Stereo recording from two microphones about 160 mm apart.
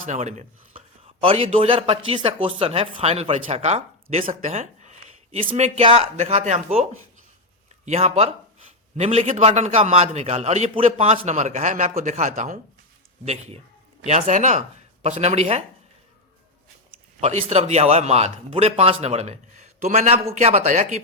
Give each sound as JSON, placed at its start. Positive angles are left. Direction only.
{"t": 0.0, "sound": "a man's voice", "side_deg": -50}
{"t": 17.2, "sound": "a man's voice", "side_deg": -40}